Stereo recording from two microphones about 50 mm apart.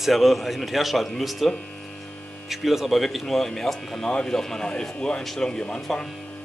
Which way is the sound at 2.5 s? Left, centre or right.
Centre.